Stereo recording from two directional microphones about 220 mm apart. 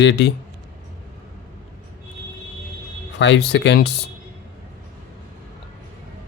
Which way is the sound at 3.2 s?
50° left (ahead or behind).